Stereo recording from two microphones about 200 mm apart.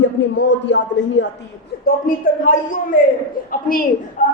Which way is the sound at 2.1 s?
45° left (ahead or behind).